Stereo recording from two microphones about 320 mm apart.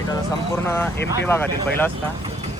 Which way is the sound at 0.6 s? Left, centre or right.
Centre.